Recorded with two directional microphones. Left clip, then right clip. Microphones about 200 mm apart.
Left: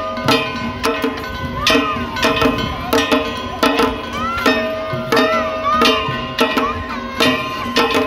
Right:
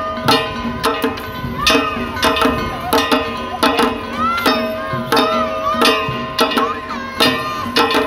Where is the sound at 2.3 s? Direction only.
20° right (ahead or behind).